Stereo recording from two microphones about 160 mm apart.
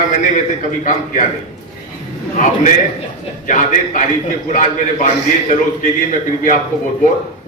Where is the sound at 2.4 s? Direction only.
55° left (ahead or behind).